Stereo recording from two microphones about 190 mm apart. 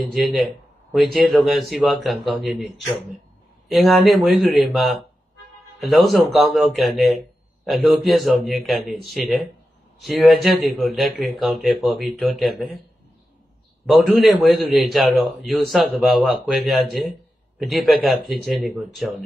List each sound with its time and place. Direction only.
0.9 s a man's voice: centre (ahead or behind)
13.8 s a man's voice: centre (ahead or behind)